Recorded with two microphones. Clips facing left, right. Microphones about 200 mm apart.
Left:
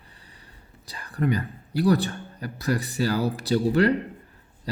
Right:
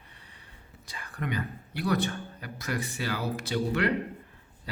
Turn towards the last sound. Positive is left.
turn(degrees=40)  # may be behind; listen again after turning